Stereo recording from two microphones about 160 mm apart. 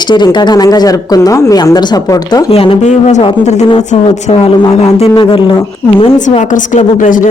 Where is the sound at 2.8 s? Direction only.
50° left (ahead or behind).